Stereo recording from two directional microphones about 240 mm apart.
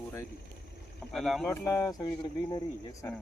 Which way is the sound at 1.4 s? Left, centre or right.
Centre.